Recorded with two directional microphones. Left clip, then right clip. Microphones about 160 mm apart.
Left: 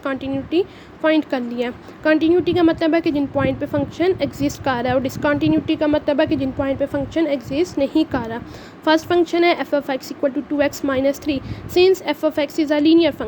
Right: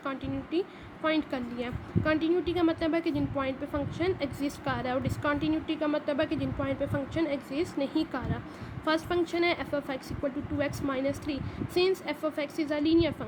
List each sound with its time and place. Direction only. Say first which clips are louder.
0.0 s speech: left 11 dB; 40° left (ahead or behind)